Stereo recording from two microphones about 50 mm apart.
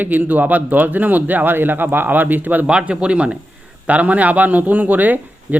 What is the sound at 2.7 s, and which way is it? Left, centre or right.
Speech, right.